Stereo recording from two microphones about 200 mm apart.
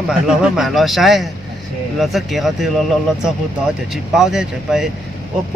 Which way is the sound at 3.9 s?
Centre (ahead or behind).